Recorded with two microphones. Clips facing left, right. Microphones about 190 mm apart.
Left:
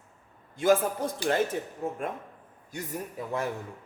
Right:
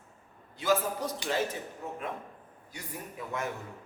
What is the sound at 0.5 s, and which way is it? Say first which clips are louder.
Speech: left 5 dB; 50° left (ahead or behind).